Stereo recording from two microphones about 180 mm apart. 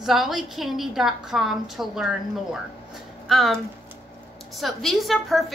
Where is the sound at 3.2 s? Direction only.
Centre (ahead or behind).